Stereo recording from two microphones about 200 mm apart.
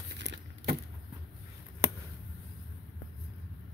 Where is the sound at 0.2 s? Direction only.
60° right (ahead or behind).